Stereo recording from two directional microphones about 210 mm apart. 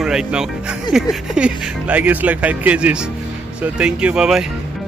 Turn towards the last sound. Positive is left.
turn(degrees=-5)  # may be behind; listen again after turning